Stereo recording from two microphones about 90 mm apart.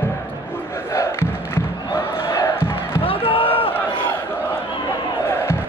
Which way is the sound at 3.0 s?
90° left.